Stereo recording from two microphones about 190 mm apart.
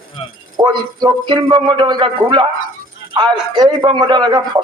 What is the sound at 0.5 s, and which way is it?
Speech, 20° right (ahead or behind).